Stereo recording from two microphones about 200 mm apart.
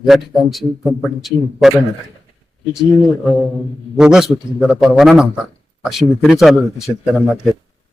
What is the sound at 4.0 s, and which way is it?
A man's voice, 5° right (ahead or behind).